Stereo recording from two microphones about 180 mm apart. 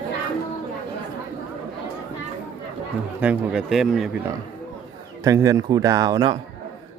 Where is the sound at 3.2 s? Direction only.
5° right (ahead or behind).